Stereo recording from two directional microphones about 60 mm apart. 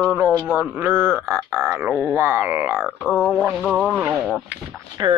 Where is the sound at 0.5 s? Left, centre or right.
Right.